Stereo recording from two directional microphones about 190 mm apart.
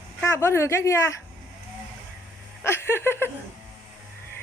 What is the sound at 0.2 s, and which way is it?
Speech, 15° left (ahead or behind).